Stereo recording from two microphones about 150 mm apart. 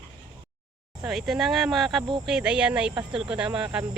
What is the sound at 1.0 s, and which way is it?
Speech, 5° right (ahead or behind).